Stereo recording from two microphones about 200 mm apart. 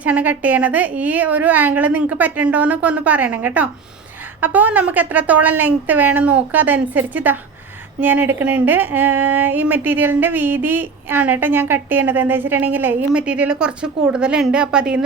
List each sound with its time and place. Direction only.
0.0 s speech: 10° right (ahead or behind)